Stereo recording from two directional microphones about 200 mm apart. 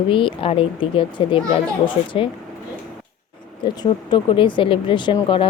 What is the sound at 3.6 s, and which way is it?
Speech, 20° left (ahead or behind).